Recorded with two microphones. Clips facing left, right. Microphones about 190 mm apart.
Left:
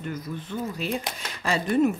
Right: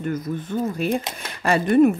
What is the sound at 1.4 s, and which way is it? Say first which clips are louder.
Speech: right 6 dB; 55° right (ahead or behind).